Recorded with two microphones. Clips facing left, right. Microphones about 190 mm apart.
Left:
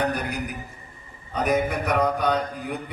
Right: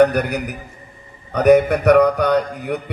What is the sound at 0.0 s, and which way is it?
Mantra, 70° right (ahead or behind).